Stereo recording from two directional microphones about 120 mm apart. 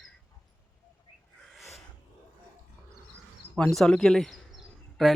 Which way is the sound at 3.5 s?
5° left (ahead or behind).